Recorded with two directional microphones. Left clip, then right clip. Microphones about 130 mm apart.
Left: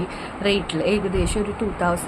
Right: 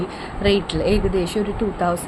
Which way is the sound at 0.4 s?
20° right (ahead or behind).